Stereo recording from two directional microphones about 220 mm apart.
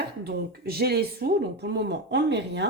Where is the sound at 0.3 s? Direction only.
45° right (ahead or behind).